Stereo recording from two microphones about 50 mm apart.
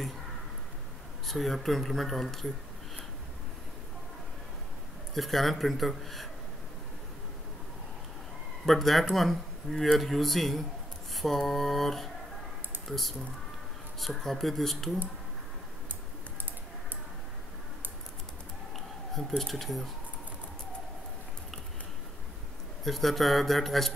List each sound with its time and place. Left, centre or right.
1.2 s speech: centre
5.1 s speech: centre
8.6 s speech: centre
19.1 s speech: centre
22.8 s speech: centre